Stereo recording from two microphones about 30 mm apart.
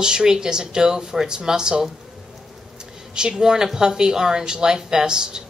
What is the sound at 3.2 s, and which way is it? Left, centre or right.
A woman's voice, right.